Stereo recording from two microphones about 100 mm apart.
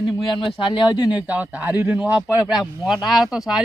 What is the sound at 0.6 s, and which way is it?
Speech, 50° left (ahead or behind).